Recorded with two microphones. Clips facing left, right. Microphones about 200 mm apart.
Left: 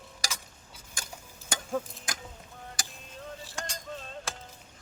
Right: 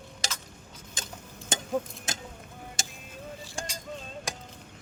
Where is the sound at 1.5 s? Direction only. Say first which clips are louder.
Right 3 dB; 20° right (ahead or behind).